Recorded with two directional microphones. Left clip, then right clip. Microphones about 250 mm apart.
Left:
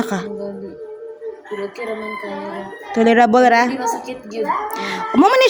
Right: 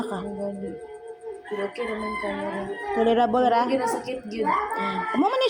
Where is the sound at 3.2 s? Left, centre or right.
Left.